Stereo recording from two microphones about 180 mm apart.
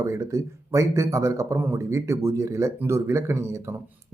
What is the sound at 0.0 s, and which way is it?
Speech, 15° right (ahead or behind).